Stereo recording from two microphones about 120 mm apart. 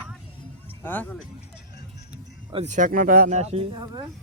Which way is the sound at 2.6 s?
90° right.